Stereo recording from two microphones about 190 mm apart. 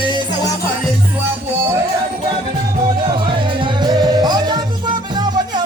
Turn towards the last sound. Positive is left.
turn(degrees=-20)  # may be behind; listen again after turning